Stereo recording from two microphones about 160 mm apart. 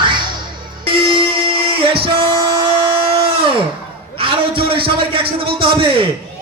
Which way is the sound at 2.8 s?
35° right (ahead or behind).